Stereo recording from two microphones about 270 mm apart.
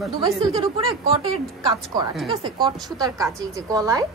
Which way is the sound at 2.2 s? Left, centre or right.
Centre.